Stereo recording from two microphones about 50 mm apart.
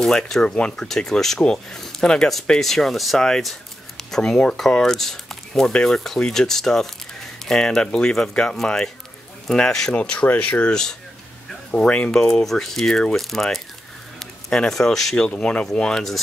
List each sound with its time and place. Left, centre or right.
0.0 s speech: centre
10.7 s speech: centre
11.7 s speech: left
12.4 s speech: centre
13.2 s speech: centre
15.2 s speech: centre